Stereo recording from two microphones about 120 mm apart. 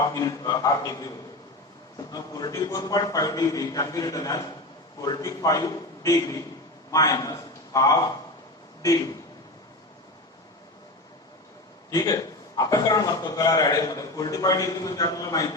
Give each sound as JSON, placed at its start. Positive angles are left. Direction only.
{"t": 0.1, "sound": "a man's voice", "side_deg": 30}
{"t": 2.1, "sound": "a man's voice", "side_deg": 30}
{"t": 11.9, "sound": "a man's voice", "side_deg": 30}